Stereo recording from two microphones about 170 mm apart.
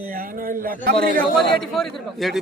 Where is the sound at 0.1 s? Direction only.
55° right (ahead or behind).